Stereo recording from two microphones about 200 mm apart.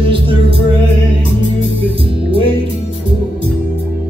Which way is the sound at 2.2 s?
25° right (ahead or behind).